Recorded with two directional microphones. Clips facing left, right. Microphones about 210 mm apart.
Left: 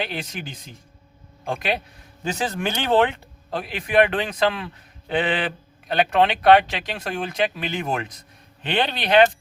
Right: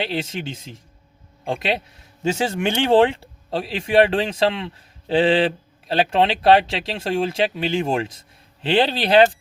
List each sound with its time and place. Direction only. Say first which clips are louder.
0.0 s speech: right 4 dB; 25° right (ahead or behind)